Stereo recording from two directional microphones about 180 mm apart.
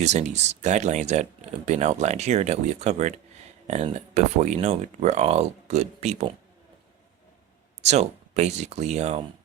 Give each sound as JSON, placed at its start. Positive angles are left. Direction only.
{"t": 0.0, "sound": "speech", "side_deg": -40}
{"t": 7.9, "sound": "speech", "side_deg": -40}